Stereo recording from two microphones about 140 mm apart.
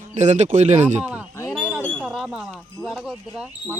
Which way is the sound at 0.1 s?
60° right (ahead or behind).